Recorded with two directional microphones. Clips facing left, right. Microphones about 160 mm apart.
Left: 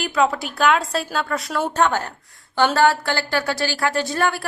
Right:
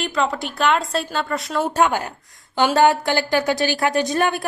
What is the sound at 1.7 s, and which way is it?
A woman's voice, 10° right (ahead or behind).